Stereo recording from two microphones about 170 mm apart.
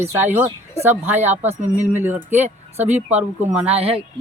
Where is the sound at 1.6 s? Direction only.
45° right (ahead or behind).